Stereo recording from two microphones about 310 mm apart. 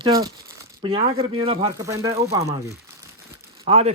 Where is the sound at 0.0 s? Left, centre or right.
Centre.